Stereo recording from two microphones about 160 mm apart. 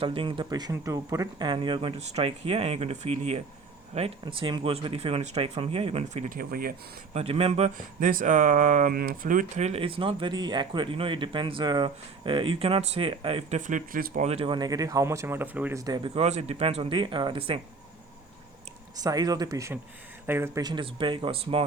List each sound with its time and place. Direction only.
0.0 s speech: 35° right (ahead or behind)
6.2 s speech: 65° right (ahead or behind)
7.1 s speech: 40° right (ahead or behind)
7.9 s speech: 55° right (ahead or behind); by 13.6 s 35° right (ahead or behind)
13.6 s speech: 50° right (ahead or behind)
14.3 s speech: 35° right (ahead or behind); by 15.8 s 10° right (ahead or behind)
15.8 s speech: 25° right (ahead or behind)
18.9 s speech: 25° right (ahead or behind)
20.6 s speech: 25° right (ahead or behind)